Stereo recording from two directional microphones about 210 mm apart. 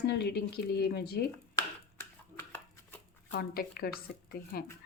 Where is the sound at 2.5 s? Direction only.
5° left (ahead or behind).